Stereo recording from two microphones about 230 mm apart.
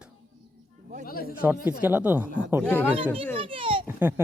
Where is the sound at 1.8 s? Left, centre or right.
Centre.